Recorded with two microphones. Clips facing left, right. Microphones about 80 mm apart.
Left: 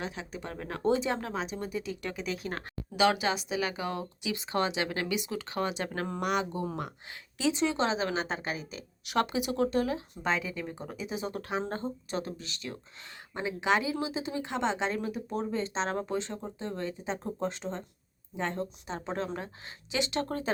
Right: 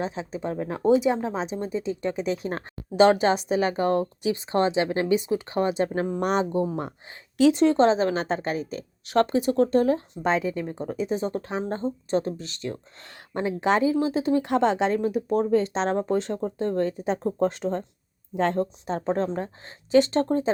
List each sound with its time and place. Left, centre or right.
0.0 s speech: right
0.8 s speech: centre
1.2 s speech: right
2.1 s speech: right
4.4 s speech: right
7.3 s speech: right
14.0 s speech: right
20.2 s speech: right